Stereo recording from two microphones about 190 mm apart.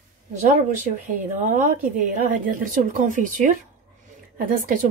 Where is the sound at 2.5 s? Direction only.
45° right (ahead or behind).